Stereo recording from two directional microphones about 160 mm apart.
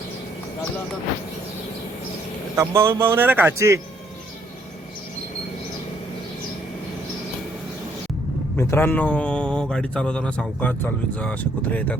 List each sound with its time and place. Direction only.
2.6 s speech: 15° right (ahead or behind)
8.5 s a man's voice: 15° left (ahead or behind)